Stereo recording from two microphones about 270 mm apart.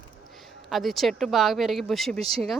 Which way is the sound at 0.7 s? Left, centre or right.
Centre.